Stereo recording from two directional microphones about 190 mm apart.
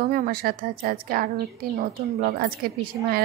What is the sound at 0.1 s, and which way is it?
A woman's voice, 50° right (ahead or behind).